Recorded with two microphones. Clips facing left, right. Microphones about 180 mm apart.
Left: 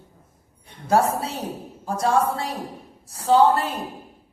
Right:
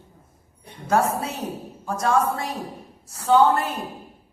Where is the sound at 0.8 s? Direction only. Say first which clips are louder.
Left 1 dB; 30° left (ahead or behind).